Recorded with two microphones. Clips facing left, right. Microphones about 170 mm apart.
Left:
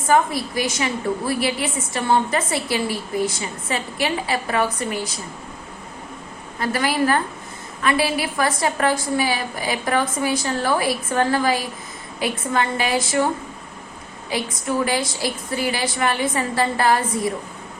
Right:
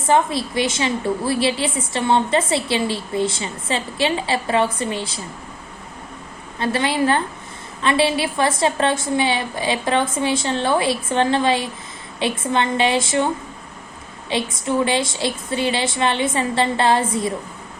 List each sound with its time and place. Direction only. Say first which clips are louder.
0.1 s a woman's voice: right 1 dB; 25° right (ahead or behind)
6.6 s a woman's voice: right 1 dB; 25° right (ahead or behind)
14.3 s a woman's voice: right 2 dB; 25° right (ahead or behind)